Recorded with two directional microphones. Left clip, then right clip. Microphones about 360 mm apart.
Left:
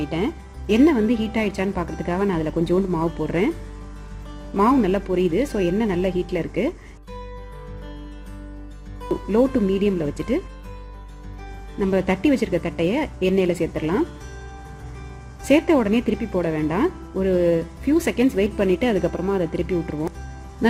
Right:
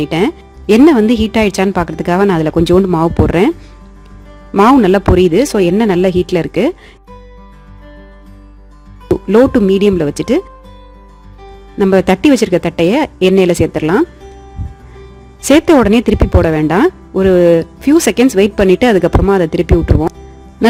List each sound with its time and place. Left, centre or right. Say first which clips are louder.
0.1 s speech: right 11 dB; right
4.5 s speech: right 11 dB; right
9.3 s speech: right 11 dB; right
11.8 s speech: right 11 dB; right
15.4 s speech: right 10 dB; right